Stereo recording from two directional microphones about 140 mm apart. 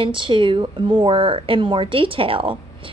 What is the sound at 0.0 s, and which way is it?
Speech, 35° right (ahead or behind).